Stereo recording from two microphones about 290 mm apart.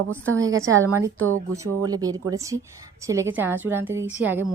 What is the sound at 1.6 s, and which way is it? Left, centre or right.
A woman's voice, centre.